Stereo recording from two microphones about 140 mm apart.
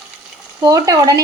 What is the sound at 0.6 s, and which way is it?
Speech, 25° right (ahead or behind).